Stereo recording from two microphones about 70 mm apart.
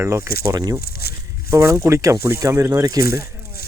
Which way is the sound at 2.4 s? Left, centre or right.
Right.